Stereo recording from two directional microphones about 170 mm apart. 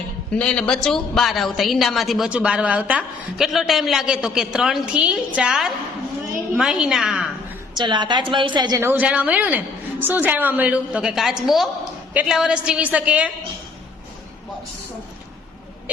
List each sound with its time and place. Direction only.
0.3 s a woman's voice: 5° left (ahead or behind)
7.8 s a woman's voice: 25° right (ahead or behind)
8.8 s a woman's voice: 10° right (ahead or behind)